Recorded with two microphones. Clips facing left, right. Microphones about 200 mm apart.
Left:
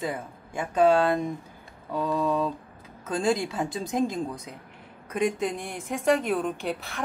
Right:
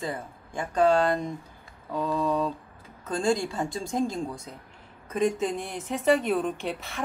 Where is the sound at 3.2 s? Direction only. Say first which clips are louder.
Even; 20° left (ahead or behind).